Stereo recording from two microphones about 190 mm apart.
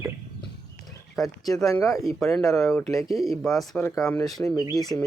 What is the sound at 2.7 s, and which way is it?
Speech, 15° left (ahead or behind).